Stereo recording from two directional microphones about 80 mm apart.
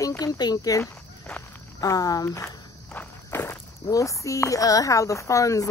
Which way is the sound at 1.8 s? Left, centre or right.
Left.